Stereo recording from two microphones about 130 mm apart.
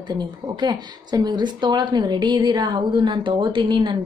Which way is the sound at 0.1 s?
35° right (ahead or behind).